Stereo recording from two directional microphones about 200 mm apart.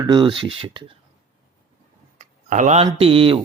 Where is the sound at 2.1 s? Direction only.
40° right (ahead or behind).